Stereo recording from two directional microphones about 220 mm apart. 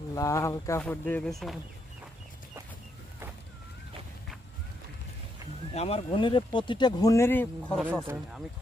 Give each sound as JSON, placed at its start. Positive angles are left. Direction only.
{"t": 0.1, "sound": "speech", "side_deg": 15}
{"t": 5.7, "sound": "speech", "side_deg": 25}
{"t": 8.0, "sound": "speech", "side_deg": -10}